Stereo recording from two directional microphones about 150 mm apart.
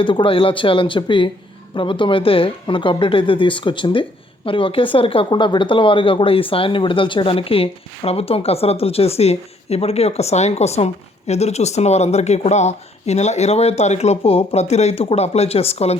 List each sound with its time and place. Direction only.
0.0 s speech: 35° left (ahead or behind)